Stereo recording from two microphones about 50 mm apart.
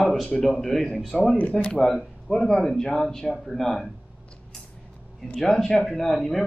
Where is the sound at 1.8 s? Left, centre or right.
Centre.